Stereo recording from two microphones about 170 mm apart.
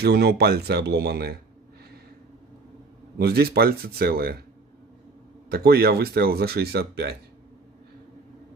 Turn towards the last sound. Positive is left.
turn(degrees=-70)  # may be behind; listen again after turning